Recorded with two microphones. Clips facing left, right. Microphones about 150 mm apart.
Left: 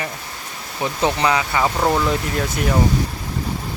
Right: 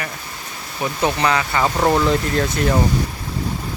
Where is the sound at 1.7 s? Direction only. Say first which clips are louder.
Right 2 dB; centre (ahead or behind).